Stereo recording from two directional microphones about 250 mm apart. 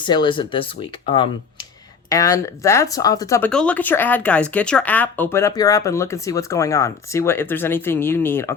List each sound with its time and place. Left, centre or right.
0.0 s speech: centre
2.0 s speech: centre